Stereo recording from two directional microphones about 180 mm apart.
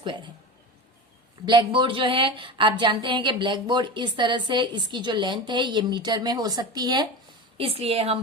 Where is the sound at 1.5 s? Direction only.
25° right (ahead or behind).